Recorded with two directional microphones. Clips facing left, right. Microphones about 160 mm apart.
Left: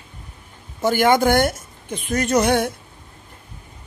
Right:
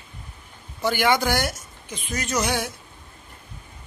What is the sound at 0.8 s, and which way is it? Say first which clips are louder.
A woman's voice: left 5 dB; 45° left (ahead or behind).